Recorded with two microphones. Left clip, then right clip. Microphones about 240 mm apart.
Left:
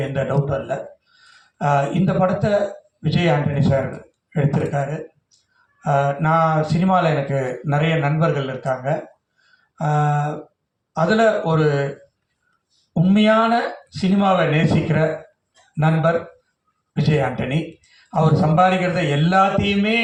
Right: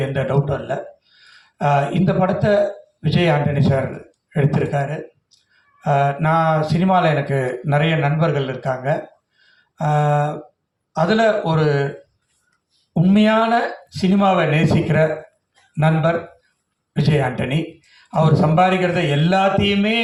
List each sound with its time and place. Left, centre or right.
0.1 s speech: right
12.9 s speech: right
16.9 s speech: right